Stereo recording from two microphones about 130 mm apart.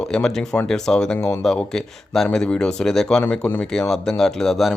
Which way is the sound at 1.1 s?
15° left (ahead or behind).